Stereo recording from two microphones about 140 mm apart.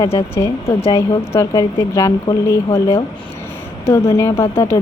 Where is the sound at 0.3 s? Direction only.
20° left (ahead or behind).